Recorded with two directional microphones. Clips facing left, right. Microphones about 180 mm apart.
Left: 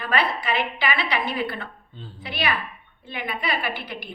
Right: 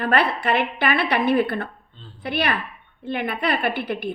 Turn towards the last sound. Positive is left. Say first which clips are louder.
# right 7 dB
turn(degrees=-55)  # may be behind; listen again after turning